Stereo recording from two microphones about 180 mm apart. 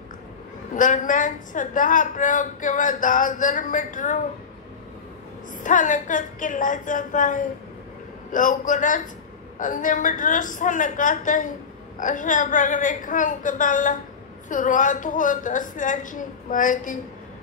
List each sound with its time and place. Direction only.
0.7 s a woman's voice: 45° left (ahead or behind)
5.6 s a woman's voice: 45° left (ahead or behind)